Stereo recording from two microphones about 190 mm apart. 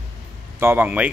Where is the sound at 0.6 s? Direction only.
10° right (ahead or behind).